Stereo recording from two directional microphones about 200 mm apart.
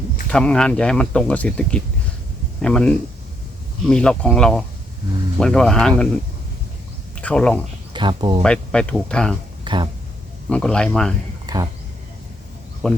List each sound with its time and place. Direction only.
0.3 s speech: 5° left (ahead or behind)
7.2 s speech: 5° left (ahead or behind)
7.9 s speech: 25° right (ahead or behind)
8.4 s speech: 5° left (ahead or behind)
9.6 s speech: 25° right (ahead or behind)
10.5 s speech: 5° left (ahead or behind)
11.4 s speech: 20° right (ahead or behind)
12.8 s speech: 5° left (ahead or behind)